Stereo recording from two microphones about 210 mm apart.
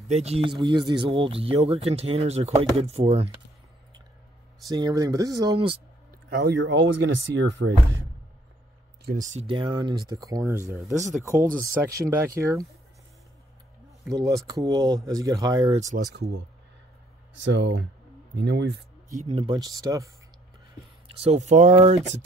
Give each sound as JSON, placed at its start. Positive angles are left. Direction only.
{"t": 0.1, "sound": "speech", "side_deg": -30}
{"t": 4.6, "sound": "speech", "side_deg": -15}
{"t": 6.3, "sound": "speech", "side_deg": -55}
{"t": 9.0, "sound": "speech", "side_deg": -40}
{"t": 11.3, "sound": "speech", "side_deg": -40}
{"t": 12.1, "sound": "speech", "side_deg": -15}
{"t": 14.1, "sound": "speech", "side_deg": -15}
{"t": 15.7, "sound": "speech", "side_deg": -35}
{"t": 17.3, "sound": "speech", "side_deg": -60}
{"t": 19.0, "sound": "speech", "side_deg": -35}
{"t": 21.2, "sound": "speech", "side_deg": -30}